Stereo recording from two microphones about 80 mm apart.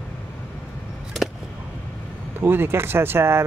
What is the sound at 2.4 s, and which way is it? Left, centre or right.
Speech, right.